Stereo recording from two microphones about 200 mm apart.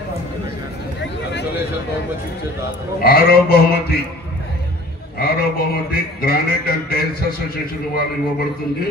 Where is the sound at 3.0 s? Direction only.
50° left (ahead or behind).